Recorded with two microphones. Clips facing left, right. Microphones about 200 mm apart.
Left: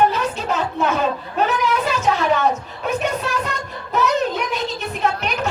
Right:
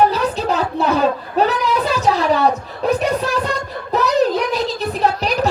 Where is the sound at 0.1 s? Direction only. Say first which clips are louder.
Right 3 dB; 35° right (ahead or behind).